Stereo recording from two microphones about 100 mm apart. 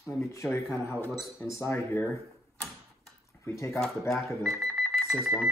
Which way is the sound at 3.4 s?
30° left (ahead or behind).